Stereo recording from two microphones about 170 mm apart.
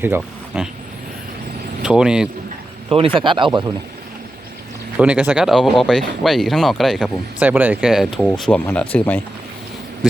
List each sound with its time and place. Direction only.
0.0 s speech: 10° right (ahead or behind)
1.8 s speech: 5° right (ahead or behind)
2.9 s speech: 30° right (ahead or behind)
4.9 s speech: 10° right (ahead or behind); by 9.2 s 10° left (ahead or behind)